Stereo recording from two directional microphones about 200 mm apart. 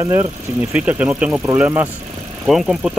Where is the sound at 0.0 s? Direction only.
15° right (ahead or behind).